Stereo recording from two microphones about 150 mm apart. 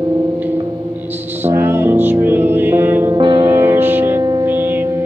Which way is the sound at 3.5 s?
15° right (ahead or behind).